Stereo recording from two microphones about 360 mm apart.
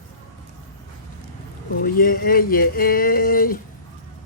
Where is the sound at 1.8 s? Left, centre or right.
Left.